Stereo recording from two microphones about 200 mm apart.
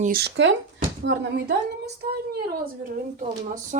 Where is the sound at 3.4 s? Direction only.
40° right (ahead or behind).